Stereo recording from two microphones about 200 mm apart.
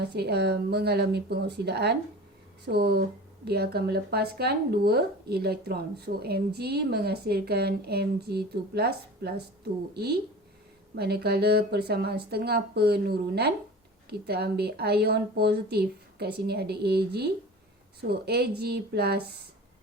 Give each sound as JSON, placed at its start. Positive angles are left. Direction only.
{"t": 0.0, "sound": "speech", "side_deg": -55}